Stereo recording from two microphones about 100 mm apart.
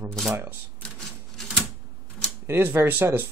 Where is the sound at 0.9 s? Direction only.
10° left (ahead or behind).